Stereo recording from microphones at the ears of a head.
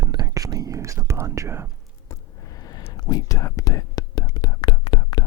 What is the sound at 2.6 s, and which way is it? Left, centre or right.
Whispering, left.